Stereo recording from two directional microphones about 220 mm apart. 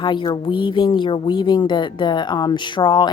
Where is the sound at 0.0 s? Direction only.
20° left (ahead or behind).